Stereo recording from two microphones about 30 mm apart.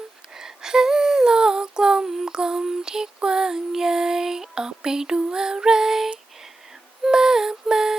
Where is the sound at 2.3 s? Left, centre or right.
Right.